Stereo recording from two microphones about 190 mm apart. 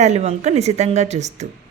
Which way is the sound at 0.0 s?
35° right (ahead or behind).